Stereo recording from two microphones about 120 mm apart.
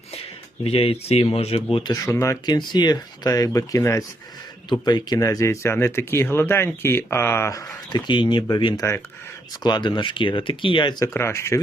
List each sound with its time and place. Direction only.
0.6 s speech: 55° left (ahead or behind)
1.7 s speech: 40° left (ahead or behind)
2.0 s speech: 25° left (ahead or behind)
7.9 s speech: 40° left (ahead or behind)
11.0 s speech: 20° left (ahead or behind)